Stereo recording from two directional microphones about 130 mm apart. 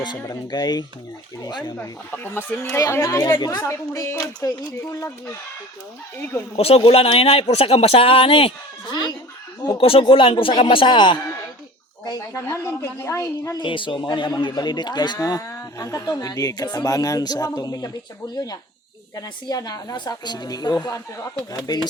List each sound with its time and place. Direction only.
0.0 s speech: 35° left (ahead or behind)
2.0 s speech: 15° left (ahead or behind)
6.6 s speech: 50° left (ahead or behind)
9.6 s speech: 40° left (ahead or behind)
12.0 s speech: 25° left (ahead or behind)
13.6 s speech: 40° left (ahead or behind)
19.1 s speech: 25° left (ahead or behind)